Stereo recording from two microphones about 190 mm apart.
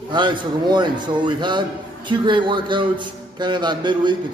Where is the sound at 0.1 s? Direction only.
25° right (ahead or behind).